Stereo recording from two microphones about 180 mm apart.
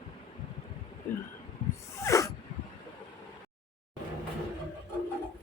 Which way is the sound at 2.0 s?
15° left (ahead or behind).